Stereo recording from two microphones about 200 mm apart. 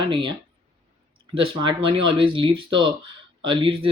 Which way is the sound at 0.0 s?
25° right (ahead or behind).